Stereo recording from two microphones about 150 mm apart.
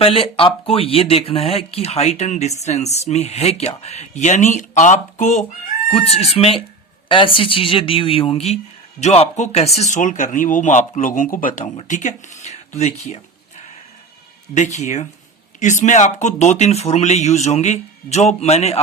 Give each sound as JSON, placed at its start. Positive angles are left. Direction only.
{"t": 0.0, "sound": "speech", "side_deg": 40}
{"t": 5.9, "sound": "speech", "side_deg": 45}
{"t": 14.5, "sound": "speech", "side_deg": 50}